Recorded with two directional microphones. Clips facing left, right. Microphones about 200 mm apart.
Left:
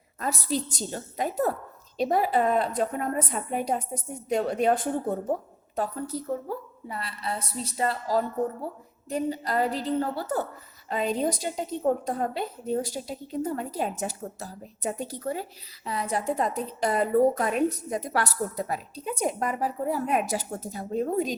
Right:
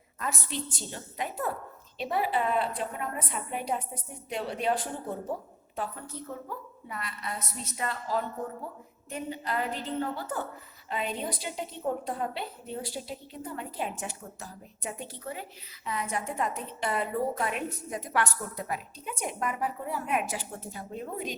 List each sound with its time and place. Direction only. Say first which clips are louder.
0.2 s a woman's voice: left 6 dB; 35° left (ahead or behind)
5.7 s a woman's voice: left 7 dB; 40° left (ahead or behind)